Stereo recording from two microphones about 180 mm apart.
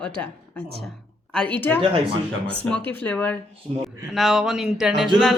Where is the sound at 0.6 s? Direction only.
35° right (ahead or behind).